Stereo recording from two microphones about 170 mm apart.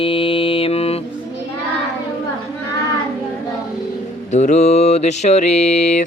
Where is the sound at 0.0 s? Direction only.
30° left (ahead or behind).